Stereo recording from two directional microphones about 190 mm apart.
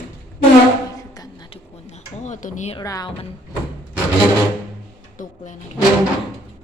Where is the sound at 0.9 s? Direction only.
20° left (ahead or behind).